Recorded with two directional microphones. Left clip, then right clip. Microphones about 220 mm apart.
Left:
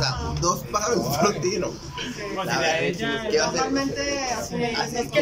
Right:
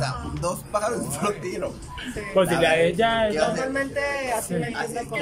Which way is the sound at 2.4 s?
50° right (ahead or behind).